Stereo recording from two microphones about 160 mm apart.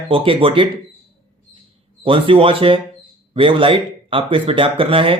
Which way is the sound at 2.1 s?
35° right (ahead or behind).